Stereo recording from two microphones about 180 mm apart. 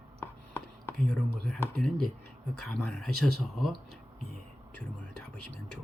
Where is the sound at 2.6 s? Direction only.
5° left (ahead or behind).